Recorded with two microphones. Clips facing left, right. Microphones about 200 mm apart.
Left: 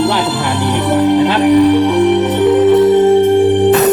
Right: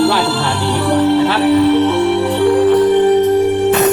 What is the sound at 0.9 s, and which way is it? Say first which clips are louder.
Music: left 2 dB; 15° left (ahead or behind).